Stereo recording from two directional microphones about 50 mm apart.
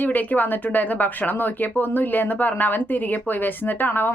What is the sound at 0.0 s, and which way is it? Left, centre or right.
A woman's voice, left.